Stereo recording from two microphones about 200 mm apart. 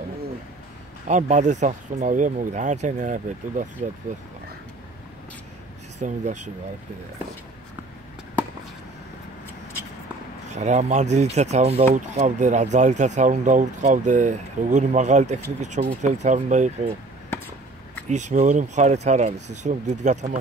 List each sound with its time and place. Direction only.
1.0 s speech: 35° right (ahead or behind)
5.9 s speech: 35° right (ahead or behind)
10.5 s speech: 35° right (ahead or behind)
18.0 s speech: 35° right (ahead or behind)